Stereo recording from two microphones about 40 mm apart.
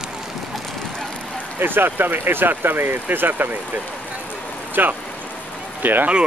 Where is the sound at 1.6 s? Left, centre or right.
Right.